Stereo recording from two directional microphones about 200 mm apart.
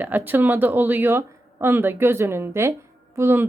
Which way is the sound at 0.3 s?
10° right (ahead or behind).